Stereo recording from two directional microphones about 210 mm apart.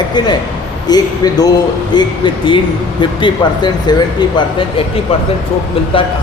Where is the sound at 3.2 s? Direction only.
20° left (ahead or behind).